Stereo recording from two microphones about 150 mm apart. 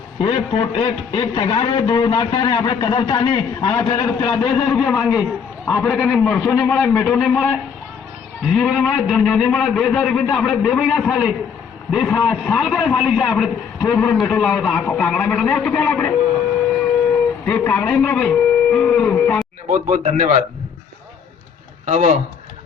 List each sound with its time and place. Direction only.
0.2 s speech: 35° left (ahead or behind)
4.9 s a man's voice: 5° left (ahead or behind)
6.4 s a man's voice: 20° left (ahead or behind)
6.7 s a man's voice: 5° left (ahead or behind)
17.4 s a man's voice: 15° left (ahead or behind)
19.7 s speech: 50° right (ahead or behind)
21.8 s speech: 50° right (ahead or behind)